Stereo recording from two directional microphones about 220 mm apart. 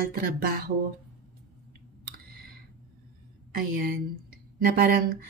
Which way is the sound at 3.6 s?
40° right (ahead or behind).